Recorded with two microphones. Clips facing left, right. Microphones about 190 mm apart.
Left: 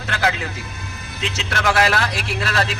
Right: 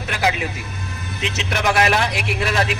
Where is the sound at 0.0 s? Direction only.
15° right (ahead or behind).